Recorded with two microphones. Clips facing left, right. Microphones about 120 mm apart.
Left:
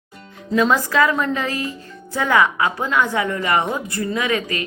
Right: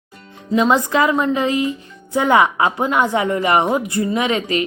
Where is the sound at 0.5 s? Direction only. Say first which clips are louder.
Right 2 dB; 20° right (ahead or behind).